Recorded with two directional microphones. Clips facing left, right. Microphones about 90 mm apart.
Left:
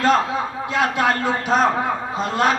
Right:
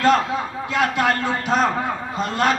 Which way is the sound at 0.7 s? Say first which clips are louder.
Even; 25° left (ahead or behind).